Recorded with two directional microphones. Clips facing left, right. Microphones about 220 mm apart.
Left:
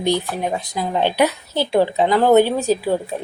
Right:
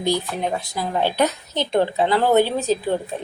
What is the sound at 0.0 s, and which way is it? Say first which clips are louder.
Speech: left 2 dB; 20° left (ahead or behind).